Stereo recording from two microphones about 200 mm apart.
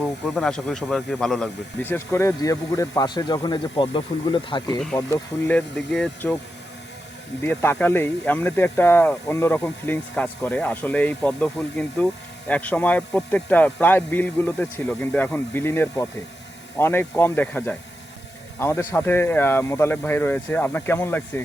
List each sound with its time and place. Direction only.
0.0 s speech: 5° left (ahead or behind); by 4.8 s 25° left (ahead or behind)
4.9 s speech: 10° left (ahead or behind)
7.4 s speech: 10° left (ahead or behind)